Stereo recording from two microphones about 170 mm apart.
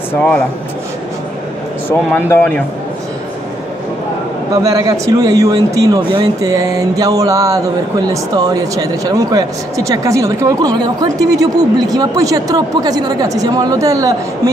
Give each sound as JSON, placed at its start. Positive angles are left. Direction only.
{"t": 0.1, "sound": "a man's voice", "side_deg": 5}
{"t": 1.9, "sound": "a man's voice", "side_deg": 15}
{"t": 4.6, "sound": "a man's voice", "side_deg": -20}